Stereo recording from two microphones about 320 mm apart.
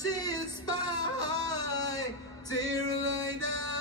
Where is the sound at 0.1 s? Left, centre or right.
Centre.